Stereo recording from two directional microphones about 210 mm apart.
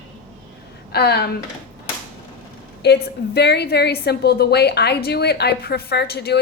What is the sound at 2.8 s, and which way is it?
A woman's voice, 50° left (ahead or behind).